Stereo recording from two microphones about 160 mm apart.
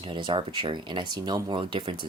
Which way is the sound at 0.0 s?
30° right (ahead or behind).